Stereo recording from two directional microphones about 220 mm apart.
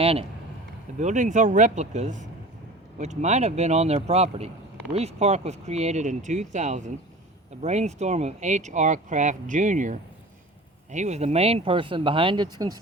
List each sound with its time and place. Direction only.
0.0 s speech: 25° right (ahead or behind)